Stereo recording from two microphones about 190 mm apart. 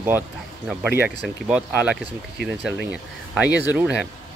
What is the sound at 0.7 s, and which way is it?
Speech, 10° right (ahead or behind).